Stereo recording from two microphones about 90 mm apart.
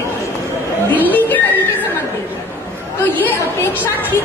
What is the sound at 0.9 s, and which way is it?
Chatter, 20° left (ahead or behind).